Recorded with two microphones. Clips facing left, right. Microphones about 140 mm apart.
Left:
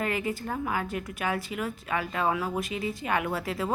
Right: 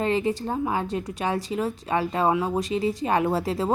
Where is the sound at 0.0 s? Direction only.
30° right (ahead or behind).